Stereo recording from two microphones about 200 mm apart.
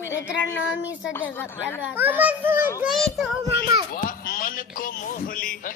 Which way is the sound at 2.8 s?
Centre (ahead or behind).